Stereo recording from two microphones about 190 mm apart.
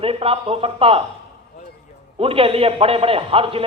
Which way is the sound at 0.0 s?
30° right (ahead or behind).